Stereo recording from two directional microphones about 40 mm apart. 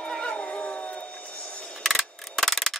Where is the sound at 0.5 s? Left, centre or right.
Left.